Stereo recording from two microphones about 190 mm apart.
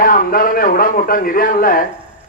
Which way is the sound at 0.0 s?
50° left (ahead or behind).